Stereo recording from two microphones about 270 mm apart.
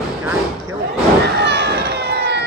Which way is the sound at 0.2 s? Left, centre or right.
Centre.